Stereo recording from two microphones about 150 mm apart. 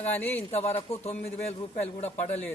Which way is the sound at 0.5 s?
45° left (ahead or behind).